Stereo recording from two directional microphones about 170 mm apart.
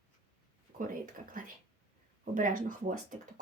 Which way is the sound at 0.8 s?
55° right (ahead or behind).